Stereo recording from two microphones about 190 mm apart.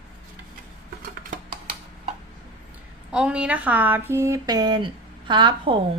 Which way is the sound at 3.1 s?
5° right (ahead or behind).